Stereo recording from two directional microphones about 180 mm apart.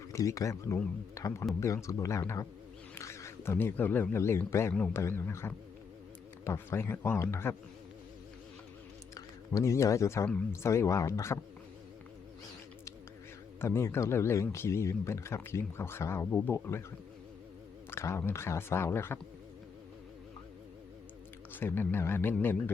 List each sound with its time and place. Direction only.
0.1 s speech: 15° left (ahead or behind)
9.1 s speech: 20° left (ahead or behind)
13.6 s speech: 15° left (ahead or behind)
17.9 s speech: 15° left (ahead or behind)
21.5 s speech: 10° left (ahead or behind)